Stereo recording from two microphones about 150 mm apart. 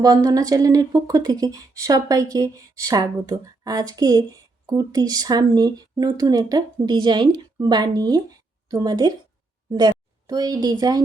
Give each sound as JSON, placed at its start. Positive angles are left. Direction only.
{"t": 0.0, "sound": "a woman's voice", "side_deg": -25}